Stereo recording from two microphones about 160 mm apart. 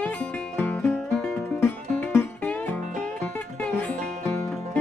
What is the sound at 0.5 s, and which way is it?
Music, 10° left (ahead or behind).